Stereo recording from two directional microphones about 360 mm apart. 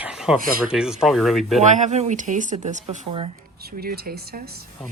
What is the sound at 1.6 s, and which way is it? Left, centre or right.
Speech, centre.